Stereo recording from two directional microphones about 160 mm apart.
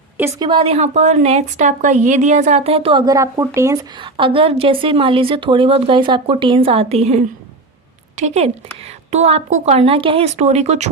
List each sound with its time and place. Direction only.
0.3 s a woman's voice: 30° right (ahead or behind)
3.9 s a woman's voice: 30° right (ahead or behind)